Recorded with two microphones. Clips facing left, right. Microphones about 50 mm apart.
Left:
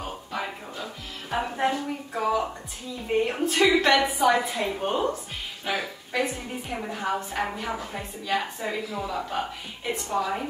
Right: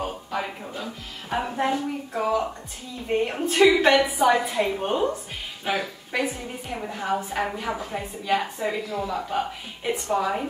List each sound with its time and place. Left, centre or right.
0.0 s a sound: centre
1.3 s a woman's voice: centre
10.0 s a woman's voice: centre